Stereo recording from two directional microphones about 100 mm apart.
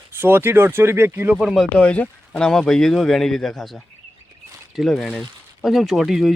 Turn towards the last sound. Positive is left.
turn(degrees=0)  # may be behind; listen again after turning